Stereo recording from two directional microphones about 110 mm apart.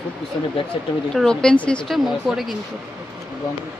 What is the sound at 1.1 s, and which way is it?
Speech, 5° left (ahead or behind).